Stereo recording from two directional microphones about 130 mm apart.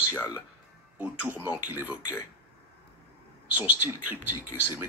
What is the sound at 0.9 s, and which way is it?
A man's voice, 10° right (ahead or behind).